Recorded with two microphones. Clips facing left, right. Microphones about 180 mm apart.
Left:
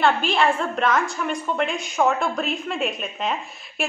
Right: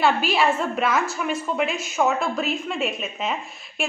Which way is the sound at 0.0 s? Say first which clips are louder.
Even; 5° right (ahead or behind).